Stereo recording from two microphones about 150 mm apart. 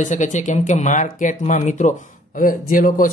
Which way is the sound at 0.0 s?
55° left (ahead or behind).